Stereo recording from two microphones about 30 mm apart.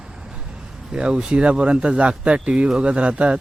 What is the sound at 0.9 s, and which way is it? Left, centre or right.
Speech, right.